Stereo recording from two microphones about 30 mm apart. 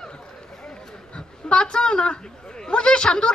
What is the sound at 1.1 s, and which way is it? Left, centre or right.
A man's voice, left.